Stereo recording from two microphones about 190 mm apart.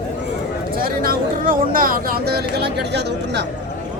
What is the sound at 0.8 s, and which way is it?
Speech, 50° right (ahead or behind).